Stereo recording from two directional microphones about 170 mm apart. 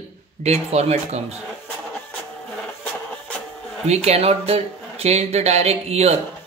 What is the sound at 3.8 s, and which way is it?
A man's voice, 40° right (ahead or behind).